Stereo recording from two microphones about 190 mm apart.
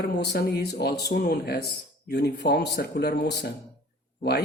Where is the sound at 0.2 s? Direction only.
55° left (ahead or behind).